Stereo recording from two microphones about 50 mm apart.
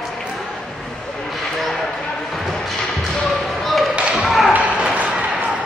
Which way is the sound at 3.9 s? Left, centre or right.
Centre.